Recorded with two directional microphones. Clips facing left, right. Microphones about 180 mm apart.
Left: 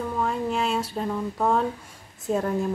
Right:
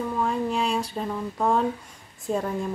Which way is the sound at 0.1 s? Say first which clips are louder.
Even; centre (ahead or behind).